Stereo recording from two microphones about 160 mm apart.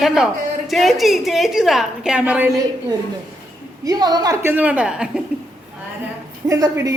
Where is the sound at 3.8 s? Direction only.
25° right (ahead or behind); by 5.2 s 5° right (ahead or behind).